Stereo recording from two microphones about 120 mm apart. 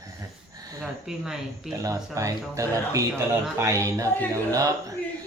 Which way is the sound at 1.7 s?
25° right (ahead or behind).